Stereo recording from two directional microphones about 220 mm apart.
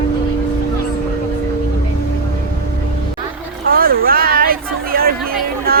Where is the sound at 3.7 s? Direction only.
40° right (ahead or behind).